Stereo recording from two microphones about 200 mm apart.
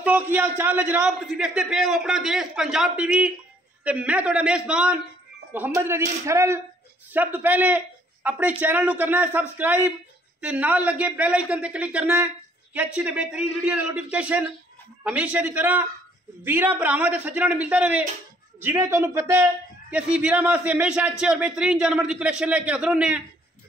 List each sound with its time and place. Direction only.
0.0 s a man's voice: 10° right (ahead or behind)